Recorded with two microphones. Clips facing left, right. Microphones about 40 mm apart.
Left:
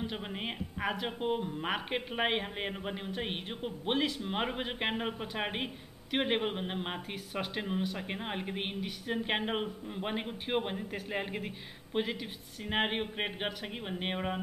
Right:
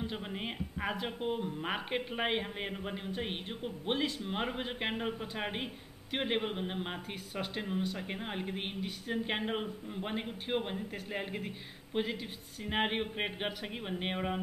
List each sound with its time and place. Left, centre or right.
0.1 s speech: centre